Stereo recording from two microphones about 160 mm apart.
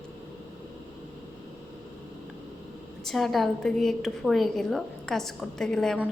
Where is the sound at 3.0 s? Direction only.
Centre (ahead or behind).